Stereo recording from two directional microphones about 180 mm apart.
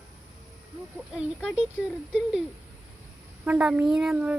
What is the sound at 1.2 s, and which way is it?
Speech, 5° right (ahead or behind).